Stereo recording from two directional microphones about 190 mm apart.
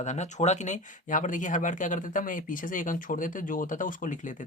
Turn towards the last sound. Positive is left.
turn(degrees=45)  # may be behind; listen again after turning